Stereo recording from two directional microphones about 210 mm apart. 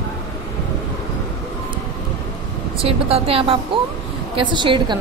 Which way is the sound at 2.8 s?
30° right (ahead or behind).